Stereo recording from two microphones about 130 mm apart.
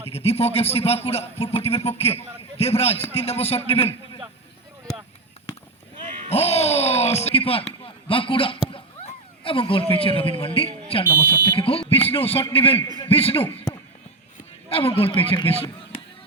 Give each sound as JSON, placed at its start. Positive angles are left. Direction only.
{"t": 0.1, "sound": "a man's voice", "side_deg": 50}
{"t": 6.2, "sound": "a man's voice", "side_deg": 50}
{"t": 14.7, "sound": "a man's voice", "side_deg": 45}